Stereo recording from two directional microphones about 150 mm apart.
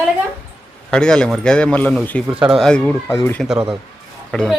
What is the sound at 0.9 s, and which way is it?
A man's voice, 5° left (ahead or behind).